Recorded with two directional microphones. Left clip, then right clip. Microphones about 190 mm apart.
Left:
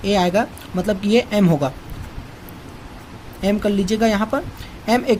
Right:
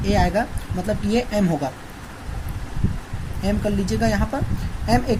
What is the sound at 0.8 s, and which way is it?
Speech, 40° left (ahead or behind).